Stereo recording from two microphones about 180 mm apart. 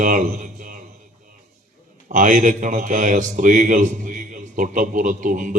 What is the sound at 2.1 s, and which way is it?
A man's voice, 45° right (ahead or behind).